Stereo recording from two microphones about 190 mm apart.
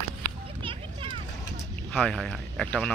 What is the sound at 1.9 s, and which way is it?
Speech, 5° left (ahead or behind).